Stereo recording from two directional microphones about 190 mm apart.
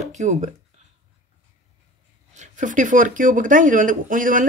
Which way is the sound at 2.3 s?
40° right (ahead or behind).